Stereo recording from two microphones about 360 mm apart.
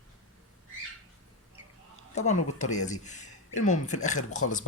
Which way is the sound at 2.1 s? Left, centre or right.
Centre.